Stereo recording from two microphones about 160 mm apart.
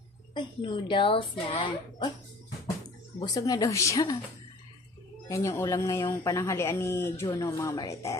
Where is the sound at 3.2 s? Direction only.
25° left (ahead or behind).